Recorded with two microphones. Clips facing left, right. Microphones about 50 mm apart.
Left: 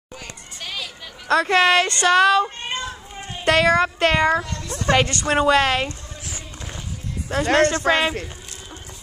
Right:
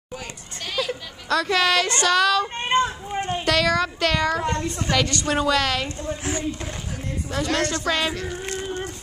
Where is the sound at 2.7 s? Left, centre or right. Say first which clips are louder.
Right 8 dB; right.